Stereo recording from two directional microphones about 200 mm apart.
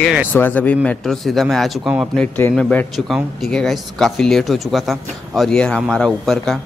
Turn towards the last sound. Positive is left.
turn(degrees=0)  # may be behind; listen again after turning